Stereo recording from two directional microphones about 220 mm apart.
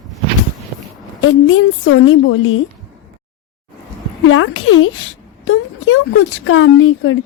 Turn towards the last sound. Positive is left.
turn(degrees=65)  # may be behind; listen again after turning